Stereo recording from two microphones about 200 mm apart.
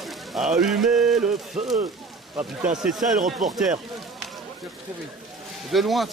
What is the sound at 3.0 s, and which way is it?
Speech, 40° right (ahead or behind).